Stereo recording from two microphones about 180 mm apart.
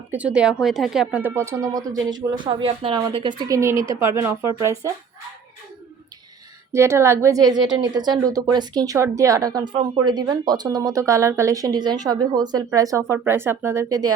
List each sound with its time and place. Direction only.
0.1 s a woman's voice: 5° right (ahead or behind)
6.7 s a woman's voice: 15° right (ahead or behind)